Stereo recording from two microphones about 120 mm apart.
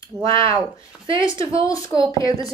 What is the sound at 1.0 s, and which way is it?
Speech, 45° right (ahead or behind).